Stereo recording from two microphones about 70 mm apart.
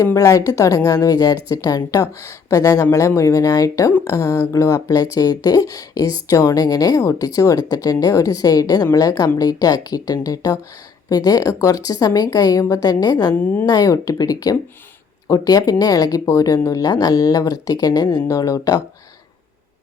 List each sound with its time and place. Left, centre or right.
0.0 s a woman's voice: left
13.3 s a woman's voice: left
13.7 s speech: left